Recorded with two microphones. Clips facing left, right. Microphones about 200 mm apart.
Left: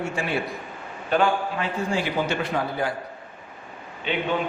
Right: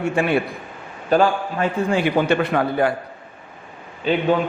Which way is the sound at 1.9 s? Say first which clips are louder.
Right 8 dB; 60° right (ahead or behind).